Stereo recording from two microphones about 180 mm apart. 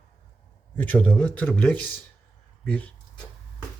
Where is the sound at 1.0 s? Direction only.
10° left (ahead or behind).